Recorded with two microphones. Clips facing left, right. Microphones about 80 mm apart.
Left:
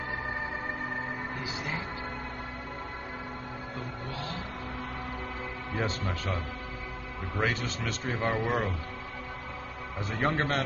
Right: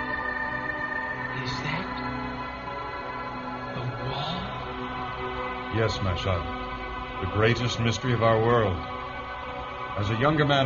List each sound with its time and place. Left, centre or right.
5.8 s a man's voice: right
9.9 s a man's voice: right